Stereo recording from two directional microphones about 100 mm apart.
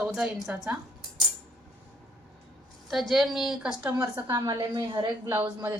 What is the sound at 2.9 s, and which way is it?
A woman's voice, centre (ahead or behind).